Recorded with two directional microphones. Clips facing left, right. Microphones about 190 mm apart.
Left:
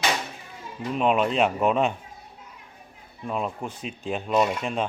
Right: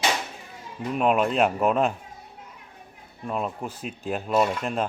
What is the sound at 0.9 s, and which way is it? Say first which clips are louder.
Speech: even; 5° right (ahead or behind).